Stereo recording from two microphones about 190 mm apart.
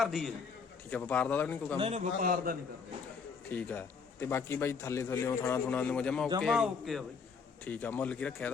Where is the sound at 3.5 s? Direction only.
10° left (ahead or behind).